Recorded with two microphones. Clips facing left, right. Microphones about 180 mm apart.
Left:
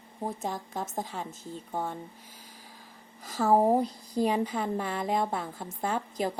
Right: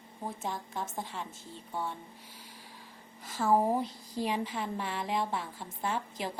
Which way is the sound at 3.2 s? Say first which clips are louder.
Left 4 dB; 40° left (ahead or behind).